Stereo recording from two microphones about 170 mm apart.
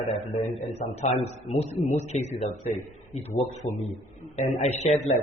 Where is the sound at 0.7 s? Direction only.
35° left (ahead or behind).